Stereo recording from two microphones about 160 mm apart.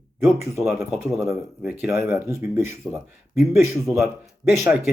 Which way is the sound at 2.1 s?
15° right (ahead or behind).